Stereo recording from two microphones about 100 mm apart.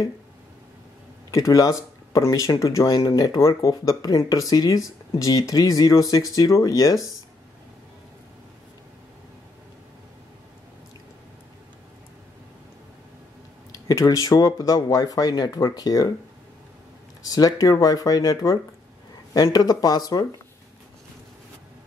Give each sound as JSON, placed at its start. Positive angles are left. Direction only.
{"t": 1.3, "sound": "speech", "side_deg": 35}
{"t": 13.8, "sound": "speech", "side_deg": 35}
{"t": 17.2, "sound": "speech", "side_deg": 40}